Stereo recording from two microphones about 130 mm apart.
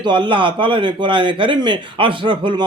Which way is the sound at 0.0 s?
35° right (ahead or behind).